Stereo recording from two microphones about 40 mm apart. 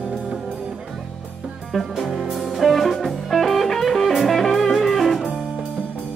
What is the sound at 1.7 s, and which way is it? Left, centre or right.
Music, centre.